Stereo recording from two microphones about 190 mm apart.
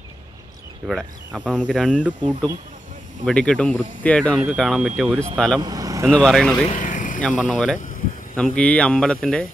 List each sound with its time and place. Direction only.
0.8 s speech: 5° right (ahead or behind)
3.3 s speech: 5° left (ahead or behind)
5.6 s speech: 20° right (ahead or behind)
6.1 s speech: 5° left (ahead or behind)
6.6 s vehicle: 40° left (ahead or behind)
7.2 s speech: 5° left (ahead or behind)